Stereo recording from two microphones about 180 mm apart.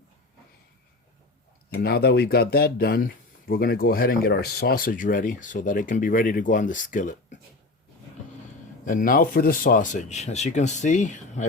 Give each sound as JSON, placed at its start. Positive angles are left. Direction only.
{"t": 1.7, "sound": "speech", "side_deg": 60}
{"t": 8.8, "sound": "speech", "side_deg": 45}